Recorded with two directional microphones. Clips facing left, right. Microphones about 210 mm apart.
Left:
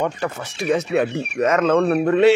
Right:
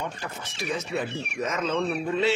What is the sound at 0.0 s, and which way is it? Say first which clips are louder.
Speech: left 11 dB; 70° left (ahead or behind).